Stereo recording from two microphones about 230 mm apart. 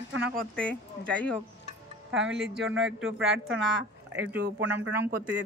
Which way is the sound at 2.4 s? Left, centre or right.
Centre.